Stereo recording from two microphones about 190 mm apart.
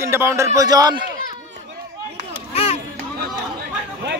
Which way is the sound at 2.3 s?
30° left (ahead or behind).